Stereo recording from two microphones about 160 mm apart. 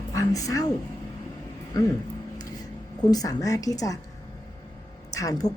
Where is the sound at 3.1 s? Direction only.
20° left (ahead or behind).